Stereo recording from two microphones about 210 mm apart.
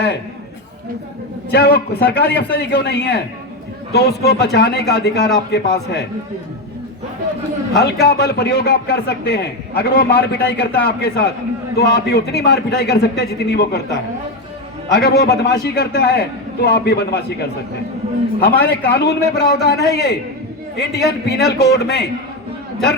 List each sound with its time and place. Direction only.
1.5 s a man's voice: 50° left (ahead or behind)
7.8 s a man's voice: 50° left (ahead or behind)
18.3 s a man's voice: 45° left (ahead or behind)